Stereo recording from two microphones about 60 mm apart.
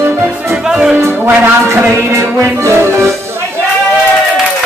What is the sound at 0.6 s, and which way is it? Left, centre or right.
Music, centre.